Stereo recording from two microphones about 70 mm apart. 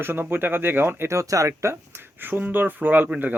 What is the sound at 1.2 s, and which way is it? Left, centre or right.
Speech, right.